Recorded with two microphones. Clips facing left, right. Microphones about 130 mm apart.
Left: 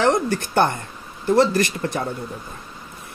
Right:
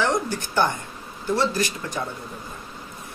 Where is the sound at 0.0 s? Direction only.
65° left (ahead or behind).